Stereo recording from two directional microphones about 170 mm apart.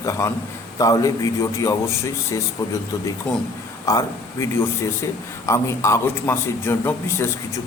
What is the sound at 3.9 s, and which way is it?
A man's voice, 20° left (ahead or behind).